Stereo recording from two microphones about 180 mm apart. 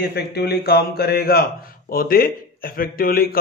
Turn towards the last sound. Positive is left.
turn(degrees=55)  # may be behind; listen again after turning